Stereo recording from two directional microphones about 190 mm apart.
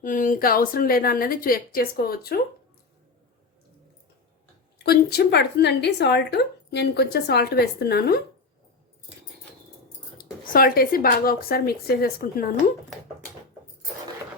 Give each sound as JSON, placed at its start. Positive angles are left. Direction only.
{"t": 0.0, "sound": "a woman's voice", "side_deg": 45}
{"t": 4.8, "sound": "speech", "side_deg": 55}
{"t": 10.2, "sound": "a woman's voice", "side_deg": 50}